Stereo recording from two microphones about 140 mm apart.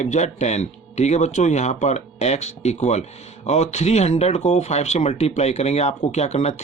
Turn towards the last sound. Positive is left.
turn(degrees=50)  # may be behind; listen again after turning